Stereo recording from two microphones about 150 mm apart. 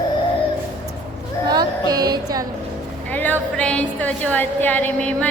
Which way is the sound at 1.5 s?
25° right (ahead or behind).